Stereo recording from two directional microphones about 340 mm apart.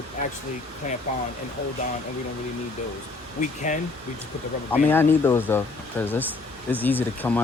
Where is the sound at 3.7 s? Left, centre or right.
Left.